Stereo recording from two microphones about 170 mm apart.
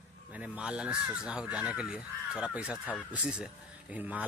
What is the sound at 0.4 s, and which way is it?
A man's voice, 5° right (ahead or behind).